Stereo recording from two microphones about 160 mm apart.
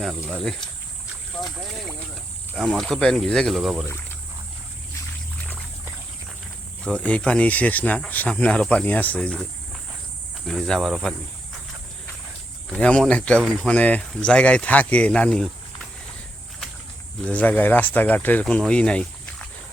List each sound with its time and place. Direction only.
0.0 s speech: centre (ahead or behind)
2.6 s speech: centre (ahead or behind)
6.8 s speech: 10° left (ahead or behind)
12.7 s speech: 5° left (ahead or behind)
17.2 s speech: 10° left (ahead or behind)